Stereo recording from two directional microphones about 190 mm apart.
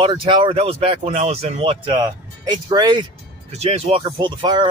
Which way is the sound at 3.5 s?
35° right (ahead or behind).